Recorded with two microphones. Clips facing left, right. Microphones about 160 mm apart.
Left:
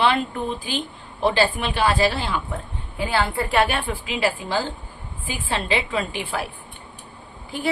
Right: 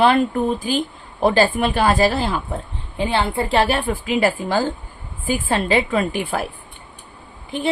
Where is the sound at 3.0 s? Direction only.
25° right (ahead or behind).